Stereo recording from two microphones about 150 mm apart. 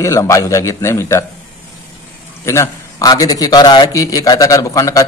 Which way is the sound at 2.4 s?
20° left (ahead or behind).